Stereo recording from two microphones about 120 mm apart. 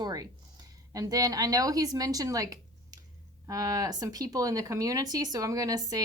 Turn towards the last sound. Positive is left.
turn(degrees=-30)  # may be behind; listen again after turning